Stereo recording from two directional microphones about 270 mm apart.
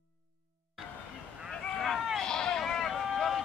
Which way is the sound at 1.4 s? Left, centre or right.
Centre.